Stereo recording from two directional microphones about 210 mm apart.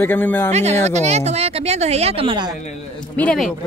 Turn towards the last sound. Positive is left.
turn(degrees=0)  # may be behind; listen again after turning